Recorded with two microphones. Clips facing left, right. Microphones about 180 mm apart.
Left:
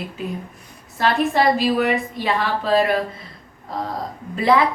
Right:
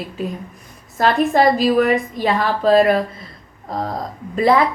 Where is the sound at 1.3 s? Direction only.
45° right (ahead or behind).